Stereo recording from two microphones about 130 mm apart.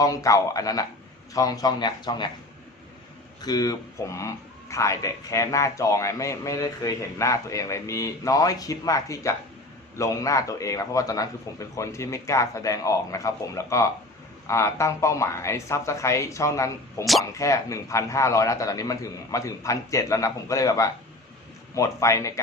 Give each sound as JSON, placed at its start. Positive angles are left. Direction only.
{"t": 0.0, "sound": "speech", "side_deg": 25}
{"t": 3.4, "sound": "speech", "side_deg": 30}